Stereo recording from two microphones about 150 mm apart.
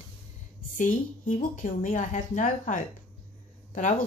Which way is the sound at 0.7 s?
65° left (ahead or behind).